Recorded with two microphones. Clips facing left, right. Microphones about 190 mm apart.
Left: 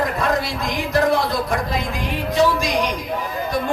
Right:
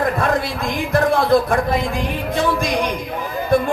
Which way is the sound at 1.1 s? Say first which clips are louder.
Right 5 dB; 55° right (ahead or behind).